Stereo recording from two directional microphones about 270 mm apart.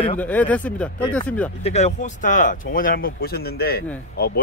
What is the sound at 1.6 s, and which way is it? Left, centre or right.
Speech, left.